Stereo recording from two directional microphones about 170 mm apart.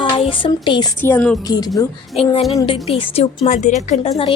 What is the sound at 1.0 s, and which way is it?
Speech, 10° left (ahead or behind).